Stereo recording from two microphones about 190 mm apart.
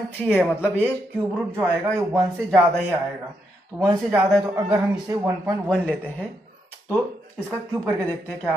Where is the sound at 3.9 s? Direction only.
15° right (ahead or behind).